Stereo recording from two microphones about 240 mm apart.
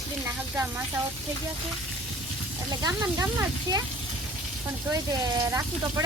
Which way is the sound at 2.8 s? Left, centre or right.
Centre.